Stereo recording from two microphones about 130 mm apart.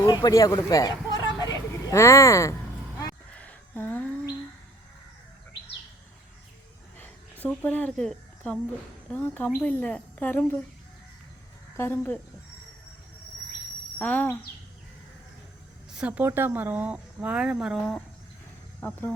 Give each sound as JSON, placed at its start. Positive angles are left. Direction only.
{"t": 0.0, "sound": "speech", "side_deg": 35}
{"t": 0.7, "sound": "a sound", "side_deg": 30}
{"t": 3.3, "sound": "a sound", "side_deg": 15}
{"t": 7.0, "sound": "a sound", "side_deg": 15}
{"t": 9.0, "sound": "a woman's voice", "side_deg": 10}
{"t": 11.8, "sound": "a woman's voice", "side_deg": 15}
{"t": 14.0, "sound": "a woman's voice", "side_deg": 15}
{"t": 15.9, "sound": "speech", "side_deg": -10}
{"t": 18.8, "sound": "a woman's voice", "side_deg": 15}